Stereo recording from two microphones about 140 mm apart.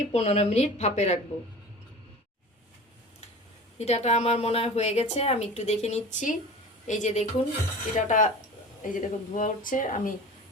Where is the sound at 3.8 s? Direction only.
50° left (ahead or behind).